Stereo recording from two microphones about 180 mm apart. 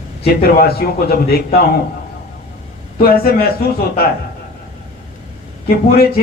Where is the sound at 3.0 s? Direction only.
55° left (ahead or behind).